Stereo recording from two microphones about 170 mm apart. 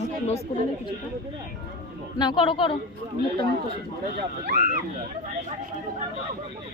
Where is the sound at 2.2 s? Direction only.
25° left (ahead or behind).